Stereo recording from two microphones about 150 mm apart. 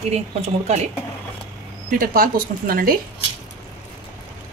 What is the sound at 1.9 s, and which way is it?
Speech, 70° right (ahead or behind).